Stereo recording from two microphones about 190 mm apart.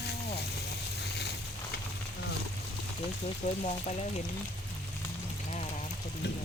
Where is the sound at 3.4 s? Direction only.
40° left (ahead or behind).